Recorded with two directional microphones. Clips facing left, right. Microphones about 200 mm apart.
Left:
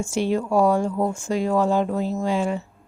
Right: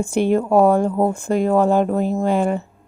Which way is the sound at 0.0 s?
55° right (ahead or behind).